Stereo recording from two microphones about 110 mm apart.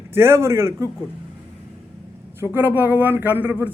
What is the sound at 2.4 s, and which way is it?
Speech, 15° right (ahead or behind).